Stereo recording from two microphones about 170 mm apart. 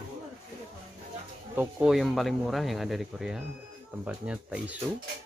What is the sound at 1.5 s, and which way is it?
Speech, 10° right (ahead or behind).